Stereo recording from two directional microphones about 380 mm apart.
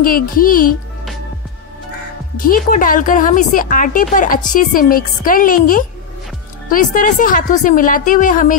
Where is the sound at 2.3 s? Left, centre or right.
Left.